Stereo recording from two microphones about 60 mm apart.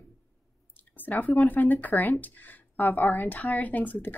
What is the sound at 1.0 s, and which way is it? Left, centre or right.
Speech, left.